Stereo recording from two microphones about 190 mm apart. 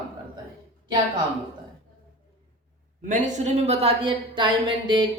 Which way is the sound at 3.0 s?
40° right (ahead or behind).